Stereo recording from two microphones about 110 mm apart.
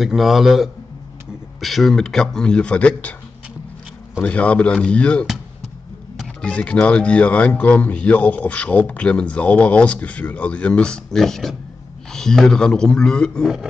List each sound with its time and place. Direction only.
0.0 s a man's voice: centre (ahead or behind)
4.2 s speech: 10° left (ahead or behind)
6.4 s speech: 10° left (ahead or behind)